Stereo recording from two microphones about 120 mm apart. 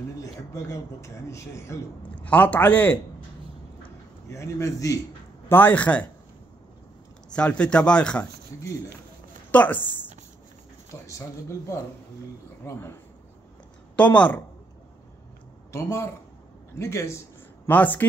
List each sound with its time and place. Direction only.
0.2 s speech: 25° left (ahead or behind)
2.0 s a man's voice: 15° left (ahead or behind)
4.3 s speech: 25° left (ahead or behind)
5.5 s a man's voice: 15° left (ahead or behind)
7.2 s a man's voice: 10° left (ahead or behind)
9.5 s a man's voice: 15° left (ahead or behind)
10.9 s speech: 25° left (ahead or behind)
13.9 s a man's voice: 10° left (ahead or behind)
15.7 s a man's voice: 20° left (ahead or behind)